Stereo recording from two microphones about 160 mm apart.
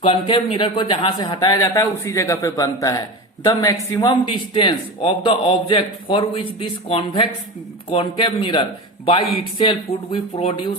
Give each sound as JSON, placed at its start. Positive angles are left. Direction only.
{"t": 0.0, "sound": "a man's voice", "side_deg": 35}
{"t": 4.3, "sound": "a man's voice", "side_deg": 35}